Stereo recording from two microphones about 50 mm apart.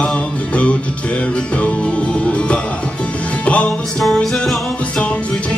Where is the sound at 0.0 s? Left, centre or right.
Left.